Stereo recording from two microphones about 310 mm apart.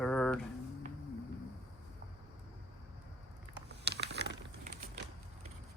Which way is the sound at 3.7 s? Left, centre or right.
Right.